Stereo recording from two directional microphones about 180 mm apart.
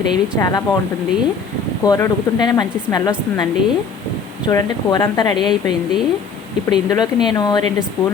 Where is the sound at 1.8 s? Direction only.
20° left (ahead or behind).